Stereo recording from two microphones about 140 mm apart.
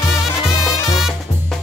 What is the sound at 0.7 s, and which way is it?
Music, 25° left (ahead or behind).